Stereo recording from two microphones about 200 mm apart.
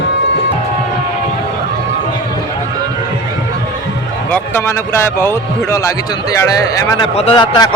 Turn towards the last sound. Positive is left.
turn(degrees=25)  # may be behind; listen again after turning